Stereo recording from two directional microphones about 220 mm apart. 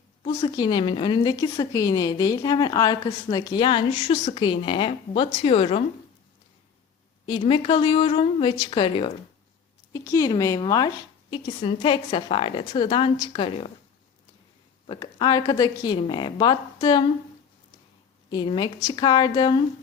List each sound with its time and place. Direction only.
0.2 s a woman's voice: 20° left (ahead or behind)
7.3 s a woman's voice: 25° left (ahead or behind)
14.8 s a woman's voice: 20° left (ahead or behind)
18.3 s a woman's voice: 20° left (ahead or behind)